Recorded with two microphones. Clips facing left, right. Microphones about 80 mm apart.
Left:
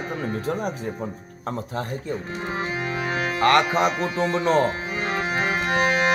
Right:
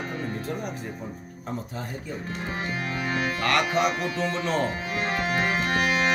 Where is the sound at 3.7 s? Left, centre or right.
Left.